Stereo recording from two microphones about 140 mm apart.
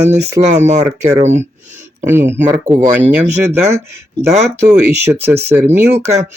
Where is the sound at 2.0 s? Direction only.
15° right (ahead or behind).